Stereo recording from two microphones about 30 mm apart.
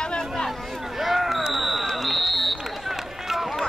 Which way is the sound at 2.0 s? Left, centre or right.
Centre.